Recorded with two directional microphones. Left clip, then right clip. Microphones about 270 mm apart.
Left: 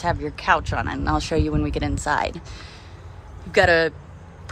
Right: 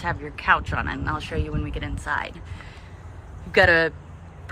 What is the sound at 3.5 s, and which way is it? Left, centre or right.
Speech, centre.